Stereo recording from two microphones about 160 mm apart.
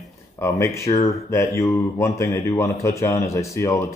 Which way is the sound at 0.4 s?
20° left (ahead or behind).